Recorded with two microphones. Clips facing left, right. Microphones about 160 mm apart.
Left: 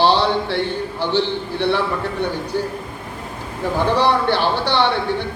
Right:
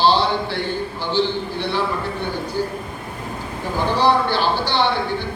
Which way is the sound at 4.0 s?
65° left (ahead or behind).